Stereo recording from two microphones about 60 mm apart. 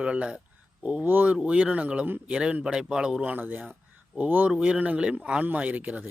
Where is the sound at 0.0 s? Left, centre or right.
Centre.